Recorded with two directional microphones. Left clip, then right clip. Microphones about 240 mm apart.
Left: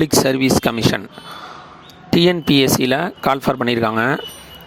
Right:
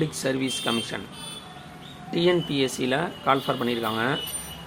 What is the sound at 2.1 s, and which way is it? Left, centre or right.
Speech, left.